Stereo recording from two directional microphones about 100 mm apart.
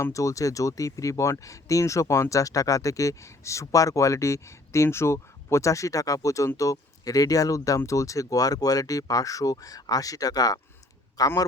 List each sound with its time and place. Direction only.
0.0 s speech: 30° left (ahead or behind)